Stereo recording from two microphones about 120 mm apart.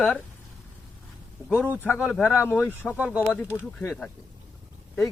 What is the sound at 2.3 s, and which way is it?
Speech, 15° left (ahead or behind).